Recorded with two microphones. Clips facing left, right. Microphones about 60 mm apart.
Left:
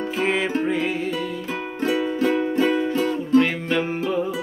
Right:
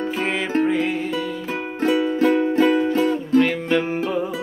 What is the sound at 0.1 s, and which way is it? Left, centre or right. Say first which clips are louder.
Music: left 3 dB; centre.